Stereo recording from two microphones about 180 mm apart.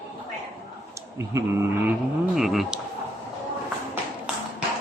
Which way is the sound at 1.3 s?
15° right (ahead or behind).